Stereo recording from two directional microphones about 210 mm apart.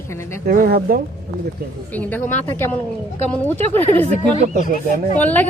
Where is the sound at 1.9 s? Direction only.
10° left (ahead or behind).